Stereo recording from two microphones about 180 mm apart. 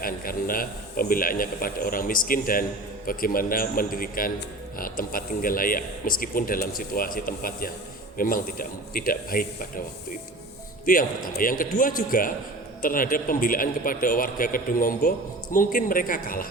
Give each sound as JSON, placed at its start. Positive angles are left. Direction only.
{"t": 0.0, "sound": "speech", "side_deg": 50}
{"t": 10.8, "sound": "speech", "side_deg": 50}